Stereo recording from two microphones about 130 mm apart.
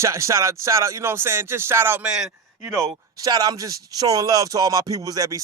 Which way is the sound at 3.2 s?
30° right (ahead or behind).